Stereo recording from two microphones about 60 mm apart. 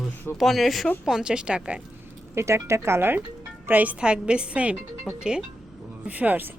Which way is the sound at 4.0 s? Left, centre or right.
Centre.